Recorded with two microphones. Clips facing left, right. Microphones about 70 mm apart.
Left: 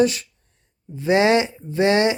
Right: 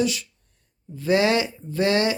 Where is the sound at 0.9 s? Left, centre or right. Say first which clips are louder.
Left 3 dB; left.